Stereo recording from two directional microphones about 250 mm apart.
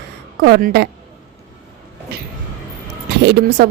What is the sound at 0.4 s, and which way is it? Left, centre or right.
Speech, right.